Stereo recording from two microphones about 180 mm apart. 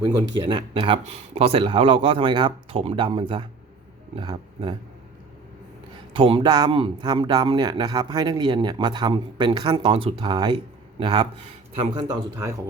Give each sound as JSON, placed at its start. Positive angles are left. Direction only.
{"t": 0.0, "sound": "speech", "side_deg": -25}
{"t": 6.1, "sound": "speech", "side_deg": -30}